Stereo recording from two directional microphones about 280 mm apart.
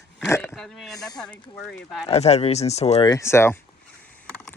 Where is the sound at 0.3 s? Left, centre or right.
Centre.